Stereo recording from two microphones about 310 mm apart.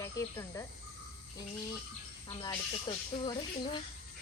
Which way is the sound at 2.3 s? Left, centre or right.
Centre.